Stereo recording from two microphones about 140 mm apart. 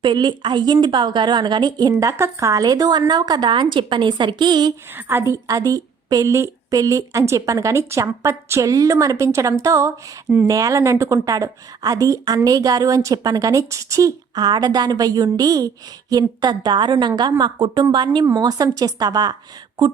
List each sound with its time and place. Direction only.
0.0 s a woman's voice: 35° right (ahead or behind)
4.9 s a woman's voice: 15° right (ahead or behind)